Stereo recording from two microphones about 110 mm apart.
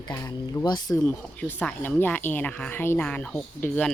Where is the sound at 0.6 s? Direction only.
40° left (ahead or behind).